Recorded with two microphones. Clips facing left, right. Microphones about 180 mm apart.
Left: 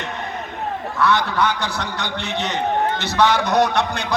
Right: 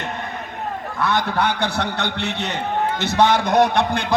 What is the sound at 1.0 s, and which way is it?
A man's voice, 55° right (ahead or behind).